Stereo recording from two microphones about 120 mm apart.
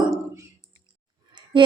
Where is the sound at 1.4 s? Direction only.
40° right (ahead or behind).